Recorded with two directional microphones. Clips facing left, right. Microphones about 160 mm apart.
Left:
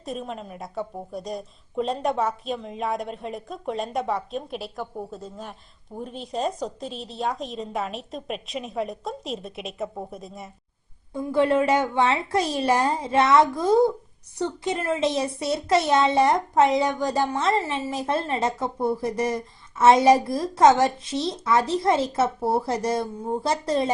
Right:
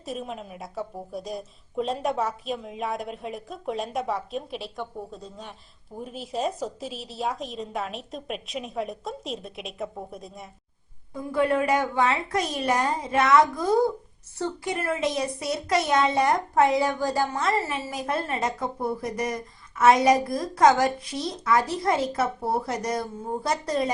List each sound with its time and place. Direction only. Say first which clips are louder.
0.0 s a woman's voice: left 1 dB; centre (ahead or behind)
11.1 s a child's voice: left 3 dB; 25° left (ahead or behind)